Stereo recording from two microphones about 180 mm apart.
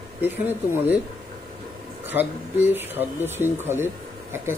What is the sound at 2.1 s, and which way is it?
Speech, 10° right (ahead or behind).